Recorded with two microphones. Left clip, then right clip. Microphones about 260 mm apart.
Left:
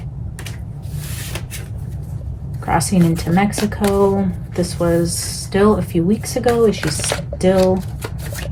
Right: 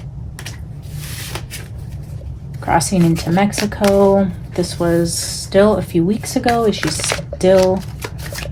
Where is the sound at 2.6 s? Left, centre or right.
Right.